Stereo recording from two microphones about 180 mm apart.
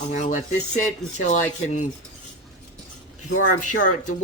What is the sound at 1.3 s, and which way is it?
Speech, 40° left (ahead or behind).